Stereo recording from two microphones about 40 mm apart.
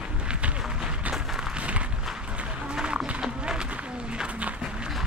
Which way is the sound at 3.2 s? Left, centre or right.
Centre.